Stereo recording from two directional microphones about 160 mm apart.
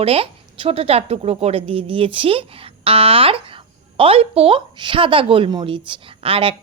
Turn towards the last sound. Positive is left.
turn(degrees=-35)  # may be behind; listen again after turning